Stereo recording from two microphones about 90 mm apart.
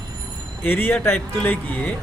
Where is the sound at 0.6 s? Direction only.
20° left (ahead or behind).